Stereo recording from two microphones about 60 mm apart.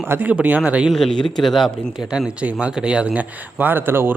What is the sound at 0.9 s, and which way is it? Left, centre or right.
Speech, centre.